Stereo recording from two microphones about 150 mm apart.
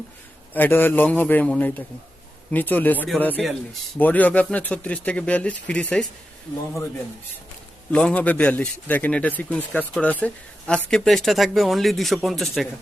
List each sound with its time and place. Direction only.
0.5 s a man's voice: 15° left (ahead or behind)
3.4 s speech: centre (ahead or behind)
4.0 s a man's voice: 10° left (ahead or behind)
7.9 s a man's voice: 10° left (ahead or behind)